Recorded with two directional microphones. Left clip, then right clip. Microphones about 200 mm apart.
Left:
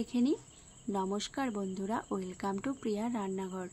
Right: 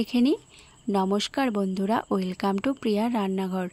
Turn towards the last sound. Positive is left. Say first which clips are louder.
# right 10 dB
turn(degrees=-50)  # may be behind; listen again after turning